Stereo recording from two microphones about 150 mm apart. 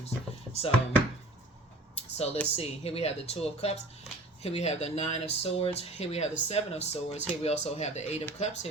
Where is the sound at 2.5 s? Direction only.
45° left (ahead or behind).